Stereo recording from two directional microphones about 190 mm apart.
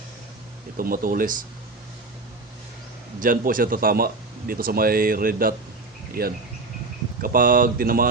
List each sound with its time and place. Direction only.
0.8 s speech: 50° right (ahead or behind)
3.2 s speech: 45° right (ahead or behind)